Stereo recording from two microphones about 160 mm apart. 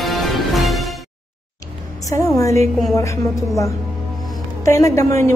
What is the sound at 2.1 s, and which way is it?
Music, 20° left (ahead or behind).